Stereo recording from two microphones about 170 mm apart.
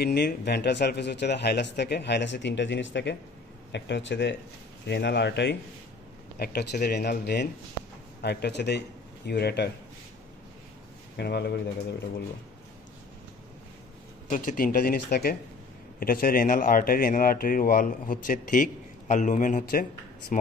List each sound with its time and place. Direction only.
0.0 s speech: 75° left (ahead or behind)
6.3 s speech: 65° left (ahead or behind)
11.1 s speech: 75° left (ahead or behind)
14.3 s speech: 50° left (ahead or behind)